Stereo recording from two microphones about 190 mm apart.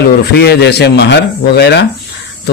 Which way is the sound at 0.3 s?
60° left (ahead or behind).